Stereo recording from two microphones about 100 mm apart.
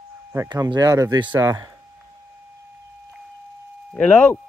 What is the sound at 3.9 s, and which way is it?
Speech, 15° left (ahead or behind).